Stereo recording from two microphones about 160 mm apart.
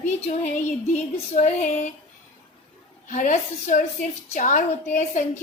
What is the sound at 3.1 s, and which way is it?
A woman's voice, 50° left (ahead or behind).